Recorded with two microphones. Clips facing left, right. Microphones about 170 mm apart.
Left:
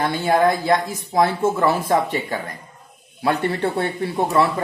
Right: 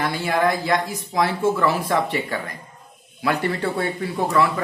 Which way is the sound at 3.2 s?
25° left (ahead or behind).